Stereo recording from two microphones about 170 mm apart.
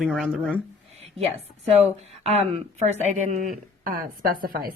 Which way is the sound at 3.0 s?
50° right (ahead or behind).